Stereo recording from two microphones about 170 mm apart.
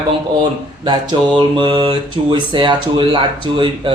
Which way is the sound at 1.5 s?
25° right (ahead or behind).